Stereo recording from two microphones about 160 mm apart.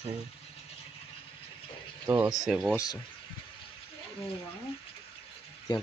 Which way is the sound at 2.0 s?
15° right (ahead or behind).